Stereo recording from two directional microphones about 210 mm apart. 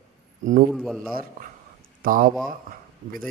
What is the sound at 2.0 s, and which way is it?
Speech, 40° right (ahead or behind).